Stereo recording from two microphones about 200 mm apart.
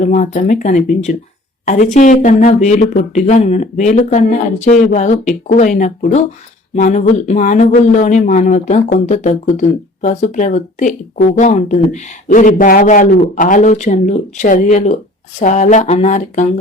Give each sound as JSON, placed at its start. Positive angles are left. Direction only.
{"t": 0.0, "sound": "speech", "side_deg": 40}